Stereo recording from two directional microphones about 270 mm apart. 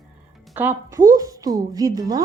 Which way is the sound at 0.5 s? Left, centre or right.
Centre.